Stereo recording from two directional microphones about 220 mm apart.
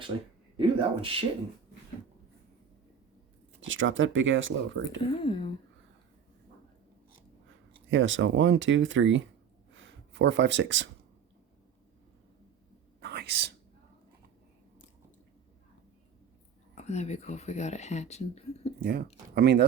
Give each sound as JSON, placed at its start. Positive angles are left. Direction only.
{"t": 0.6, "sound": "speech", "side_deg": -25}
{"t": 3.7, "sound": "speech", "side_deg": -60}
{"t": 5.2, "sound": "speech", "side_deg": 25}
{"t": 7.9, "sound": "speech", "side_deg": -60}
{"t": 9.7, "sound": "a sound", "side_deg": -55}
{"t": 13.0, "sound": "whispering", "side_deg": -50}
{"t": 16.7, "sound": "speech", "side_deg": 30}
{"t": 18.8, "sound": "speech", "side_deg": -45}